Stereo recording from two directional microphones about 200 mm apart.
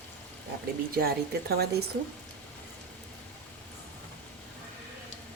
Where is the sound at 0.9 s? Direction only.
50° right (ahead or behind).